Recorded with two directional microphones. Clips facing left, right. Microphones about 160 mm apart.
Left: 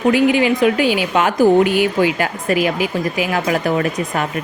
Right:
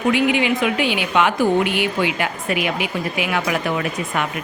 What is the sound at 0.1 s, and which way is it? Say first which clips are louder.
A woman's voice: left 4 dB; 40° left (ahead or behind).